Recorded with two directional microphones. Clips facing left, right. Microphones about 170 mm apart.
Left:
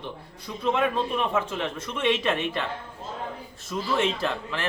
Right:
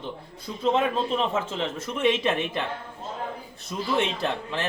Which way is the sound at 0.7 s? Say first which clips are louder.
Even; 25° right (ahead or behind).